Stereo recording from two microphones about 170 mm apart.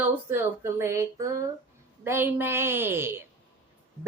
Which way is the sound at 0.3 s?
15° right (ahead or behind).